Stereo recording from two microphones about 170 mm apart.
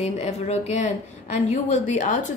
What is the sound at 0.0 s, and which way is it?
A woman's voice, 40° left (ahead or behind).